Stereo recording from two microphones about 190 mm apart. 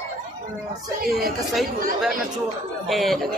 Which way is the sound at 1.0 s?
55° right (ahead or behind).